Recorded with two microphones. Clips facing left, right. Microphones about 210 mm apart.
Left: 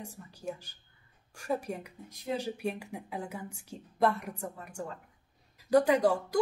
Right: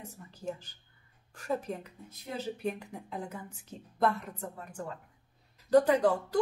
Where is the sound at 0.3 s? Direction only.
10° left (ahead or behind).